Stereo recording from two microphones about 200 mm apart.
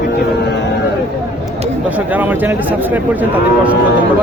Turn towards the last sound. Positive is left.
turn(degrees=-10)  # may be behind; listen again after turning